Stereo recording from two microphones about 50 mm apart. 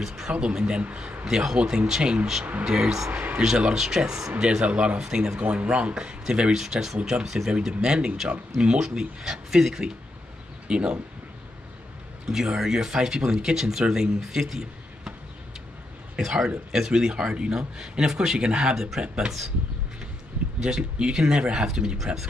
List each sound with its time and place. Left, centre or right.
0.0 s speech: centre
0.3 s speech: centre
1.2 s speech: centre
3.1 s speech: right
3.4 s speech: centre
5.4 s speech: right
6.5 s speech: centre
12.3 s speech: centre
14.2 s a sound: centre
16.2 s speech: centre
20.6 s speech: centre